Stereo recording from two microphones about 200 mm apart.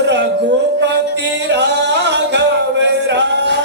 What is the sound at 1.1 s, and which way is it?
Music, 60° right (ahead or behind).